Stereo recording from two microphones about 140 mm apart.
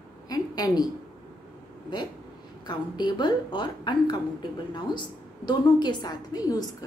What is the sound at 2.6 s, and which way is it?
A woman's voice, 30° left (ahead or behind).